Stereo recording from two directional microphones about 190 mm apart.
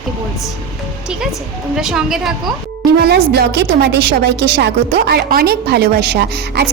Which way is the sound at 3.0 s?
55° right (ahead or behind).